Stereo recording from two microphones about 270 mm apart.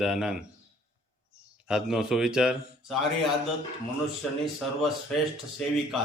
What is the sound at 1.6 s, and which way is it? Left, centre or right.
Speech, centre.